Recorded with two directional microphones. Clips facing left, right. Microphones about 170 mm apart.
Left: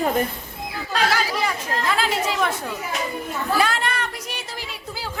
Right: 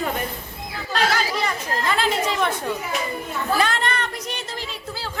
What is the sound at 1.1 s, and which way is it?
A woman's voice, 5° left (ahead or behind).